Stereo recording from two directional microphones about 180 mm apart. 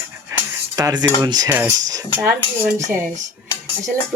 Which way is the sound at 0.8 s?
20° right (ahead or behind).